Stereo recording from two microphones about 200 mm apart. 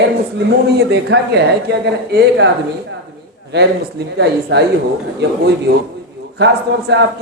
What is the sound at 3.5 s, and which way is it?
Speech, 55° right (ahead or behind).